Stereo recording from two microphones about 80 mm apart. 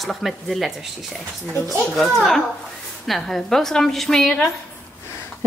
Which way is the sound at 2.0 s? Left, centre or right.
Centre.